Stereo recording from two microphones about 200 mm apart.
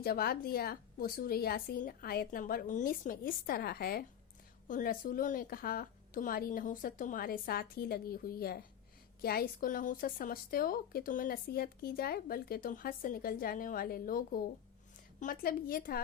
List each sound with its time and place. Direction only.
0.0 s a woman's voice: 50° left (ahead or behind)